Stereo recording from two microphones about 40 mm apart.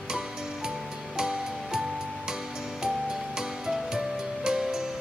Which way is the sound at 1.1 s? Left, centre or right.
Centre.